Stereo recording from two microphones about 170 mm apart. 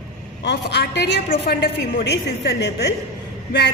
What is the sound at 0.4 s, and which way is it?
Speech, 90° left.